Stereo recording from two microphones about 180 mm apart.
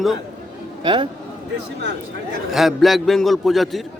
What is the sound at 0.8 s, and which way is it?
Speech, 25° right (ahead or behind).